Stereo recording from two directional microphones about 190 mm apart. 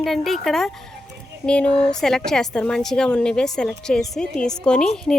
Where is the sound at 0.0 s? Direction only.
Centre (ahead or behind).